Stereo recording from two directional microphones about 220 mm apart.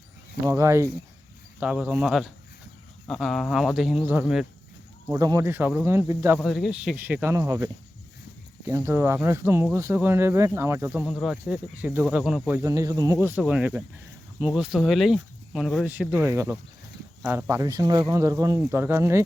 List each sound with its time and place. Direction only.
0.4 s speech: 10° right (ahead or behind)
5.1 s speech: 15° right (ahead or behind)
8.7 s speech: 10° right (ahead or behind)